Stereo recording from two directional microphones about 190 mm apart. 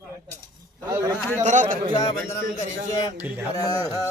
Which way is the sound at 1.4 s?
40° right (ahead or behind).